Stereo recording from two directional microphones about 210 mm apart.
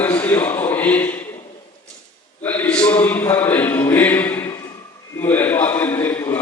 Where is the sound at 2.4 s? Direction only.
10° left (ahead or behind).